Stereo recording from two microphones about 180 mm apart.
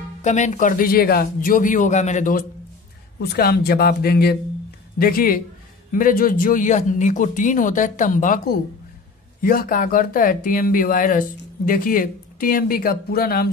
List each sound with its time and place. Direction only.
0.2 s speech: 40° left (ahead or behind)
3.2 s speech: 65° left (ahead or behind)